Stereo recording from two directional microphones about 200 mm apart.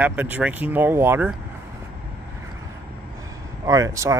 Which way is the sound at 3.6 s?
15° right (ahead or behind).